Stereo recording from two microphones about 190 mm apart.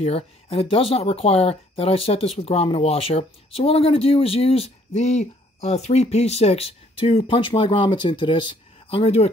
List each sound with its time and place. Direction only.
0.0 s speech: 30° left (ahead or behind)